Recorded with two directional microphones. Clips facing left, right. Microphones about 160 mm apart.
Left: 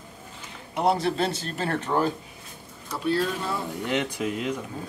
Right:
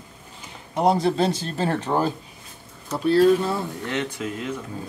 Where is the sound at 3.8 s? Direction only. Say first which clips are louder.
Left 1 dB; 10° left (ahead or behind).